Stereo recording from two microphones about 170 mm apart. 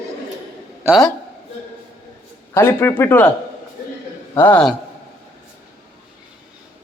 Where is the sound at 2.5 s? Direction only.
15° left (ahead or behind).